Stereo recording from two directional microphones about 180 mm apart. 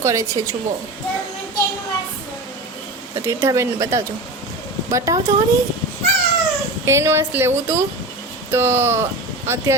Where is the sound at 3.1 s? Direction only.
15° right (ahead or behind).